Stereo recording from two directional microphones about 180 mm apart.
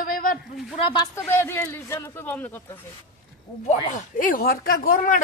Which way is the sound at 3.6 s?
45° left (ahead or behind).